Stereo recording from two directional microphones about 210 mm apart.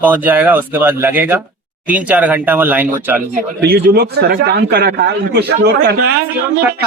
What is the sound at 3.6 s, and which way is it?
Speech, 55° right (ahead or behind).